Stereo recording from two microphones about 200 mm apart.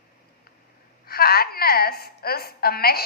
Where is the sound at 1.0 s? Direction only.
50° left (ahead or behind).